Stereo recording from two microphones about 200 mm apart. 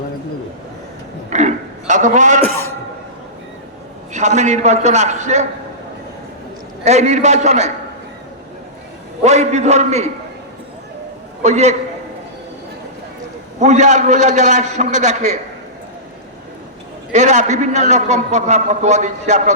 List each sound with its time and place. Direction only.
1.3 s a sound: 35° right (ahead or behind)
4.4 s a man's voice: 35° right (ahead or behind)
6.8 s a man's voice: 35° right (ahead or behind)
9.2 s a man's voice: 35° right (ahead or behind)
11.4 s a man's voice: 35° right (ahead or behind)
13.6 s a man's voice: 35° right (ahead or behind)
17.1 s a man's voice: 35° right (ahead or behind)